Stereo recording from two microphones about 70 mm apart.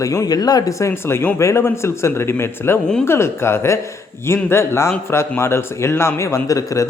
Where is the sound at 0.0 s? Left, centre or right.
Left.